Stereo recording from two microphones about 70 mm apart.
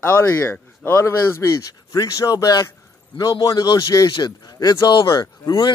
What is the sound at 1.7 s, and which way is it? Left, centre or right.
A man's voice, left.